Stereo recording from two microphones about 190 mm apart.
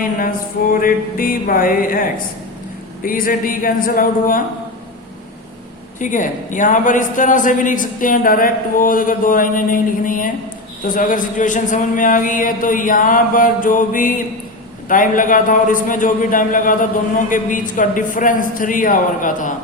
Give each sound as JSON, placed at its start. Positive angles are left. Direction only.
{"t": 0.0, "sound": "a woman's voice", "side_deg": 45}
{"t": 6.0, "sound": "a woman's voice", "side_deg": 40}